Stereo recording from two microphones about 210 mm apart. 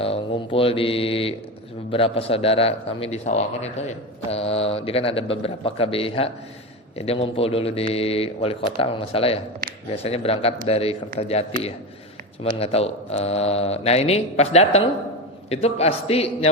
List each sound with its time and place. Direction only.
0.0 s mantra: 25° left (ahead or behind)
1.9 s a man's voice: 25° left (ahead or behind)